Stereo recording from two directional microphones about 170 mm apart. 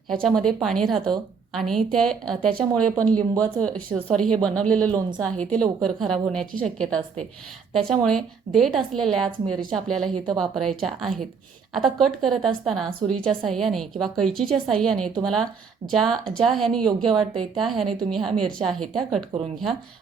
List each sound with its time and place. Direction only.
0.1 s a woman's voice: centre (ahead or behind)
17.2 s speech: 25° right (ahead or behind)
17.6 s a woman's voice: centre (ahead or behind)